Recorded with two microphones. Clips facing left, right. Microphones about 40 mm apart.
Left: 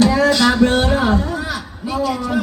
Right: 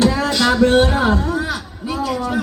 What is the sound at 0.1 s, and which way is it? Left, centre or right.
Music, centre.